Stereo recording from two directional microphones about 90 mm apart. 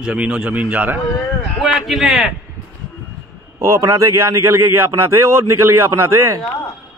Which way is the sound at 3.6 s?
35° right (ahead or behind).